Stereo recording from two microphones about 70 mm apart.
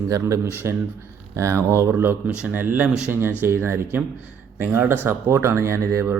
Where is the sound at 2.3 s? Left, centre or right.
Right.